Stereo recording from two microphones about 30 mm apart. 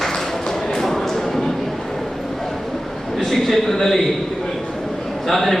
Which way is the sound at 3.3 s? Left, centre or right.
Centre.